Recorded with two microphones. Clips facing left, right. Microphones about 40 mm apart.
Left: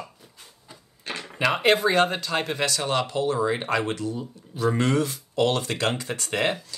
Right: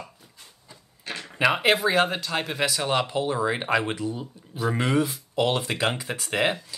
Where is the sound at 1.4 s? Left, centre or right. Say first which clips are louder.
Even; centre.